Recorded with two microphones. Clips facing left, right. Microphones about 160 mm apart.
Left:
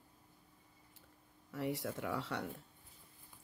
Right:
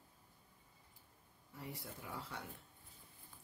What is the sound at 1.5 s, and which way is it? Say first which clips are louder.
Speech: left 11 dB; 80° left.